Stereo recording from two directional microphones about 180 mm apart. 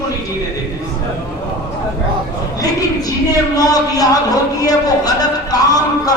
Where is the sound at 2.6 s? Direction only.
20° left (ahead or behind).